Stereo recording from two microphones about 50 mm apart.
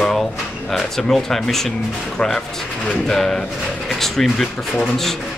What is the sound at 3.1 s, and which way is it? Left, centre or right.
Speech, centre.